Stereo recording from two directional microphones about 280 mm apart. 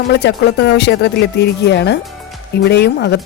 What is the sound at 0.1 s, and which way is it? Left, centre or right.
Speech, left.